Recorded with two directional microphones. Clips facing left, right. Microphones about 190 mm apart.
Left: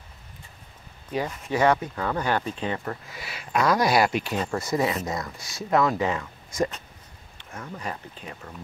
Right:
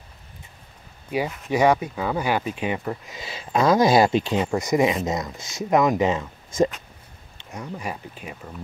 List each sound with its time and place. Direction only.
1.1 s speech: 10° right (ahead or behind)